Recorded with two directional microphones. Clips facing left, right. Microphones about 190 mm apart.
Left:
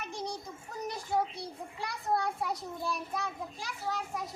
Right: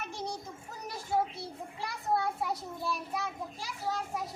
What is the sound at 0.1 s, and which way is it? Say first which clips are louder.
Child singing: even; 5° right (ahead or behind).